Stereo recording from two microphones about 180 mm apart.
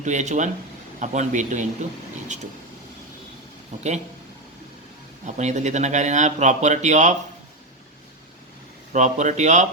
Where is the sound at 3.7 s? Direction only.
40° right (ahead or behind).